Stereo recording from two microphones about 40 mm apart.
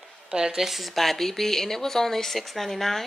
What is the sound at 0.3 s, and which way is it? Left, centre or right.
Speech, centre.